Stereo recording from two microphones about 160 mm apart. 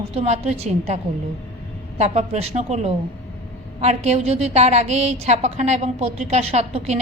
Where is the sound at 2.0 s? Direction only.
45° right (ahead or behind).